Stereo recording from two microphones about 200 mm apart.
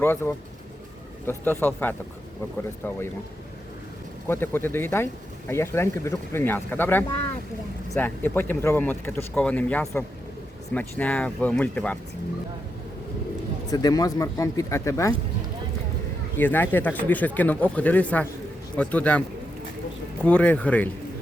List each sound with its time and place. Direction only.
0.0 s speech: 10° left (ahead or behind)
4.3 s speech: 10° left (ahead or behind)
13.7 s speech: 20° left (ahead or behind)
16.4 s speech: 10° left (ahead or behind)
20.2 s speech: 5° left (ahead or behind)